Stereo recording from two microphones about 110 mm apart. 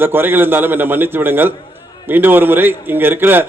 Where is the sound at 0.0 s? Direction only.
20° right (ahead or behind).